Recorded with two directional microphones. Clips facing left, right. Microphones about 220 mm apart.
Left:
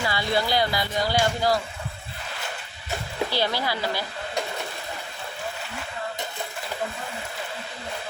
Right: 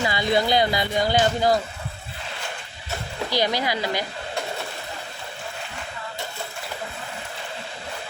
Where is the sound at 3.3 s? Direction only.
15° right (ahead or behind).